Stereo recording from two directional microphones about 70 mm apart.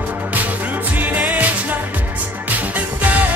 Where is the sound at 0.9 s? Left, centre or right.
Right.